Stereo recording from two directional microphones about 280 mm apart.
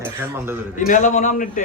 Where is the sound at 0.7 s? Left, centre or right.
Left.